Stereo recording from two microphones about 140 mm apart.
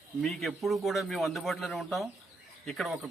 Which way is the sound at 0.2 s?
5° left (ahead or behind).